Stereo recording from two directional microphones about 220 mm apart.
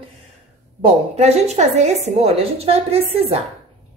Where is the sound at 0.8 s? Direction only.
30° right (ahead or behind).